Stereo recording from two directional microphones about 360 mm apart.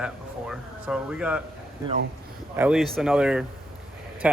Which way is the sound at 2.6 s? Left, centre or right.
Centre.